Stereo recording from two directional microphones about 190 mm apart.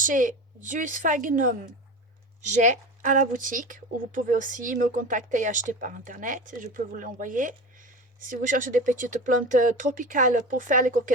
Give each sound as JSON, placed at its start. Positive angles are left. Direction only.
{"t": 0.0, "sound": "speech", "side_deg": -45}